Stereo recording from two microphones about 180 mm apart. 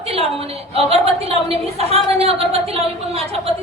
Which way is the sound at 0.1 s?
35° right (ahead or behind).